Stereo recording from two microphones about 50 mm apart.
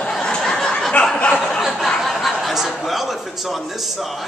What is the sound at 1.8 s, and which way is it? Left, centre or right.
A man's voice, centre.